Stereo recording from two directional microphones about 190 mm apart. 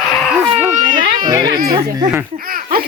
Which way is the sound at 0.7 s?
45° right (ahead or behind).